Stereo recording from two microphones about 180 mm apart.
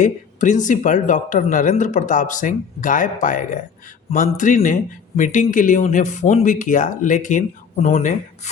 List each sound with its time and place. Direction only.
0.0 s a man's voice: 45° left (ahead or behind)